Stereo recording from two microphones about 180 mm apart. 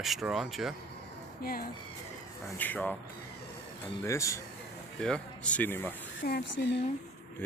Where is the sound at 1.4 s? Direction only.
55° left (ahead or behind).